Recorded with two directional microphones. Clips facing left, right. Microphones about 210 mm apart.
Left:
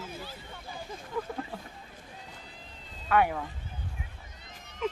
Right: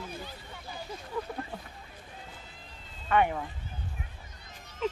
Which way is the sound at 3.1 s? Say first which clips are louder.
Even; 5° left (ahead or behind).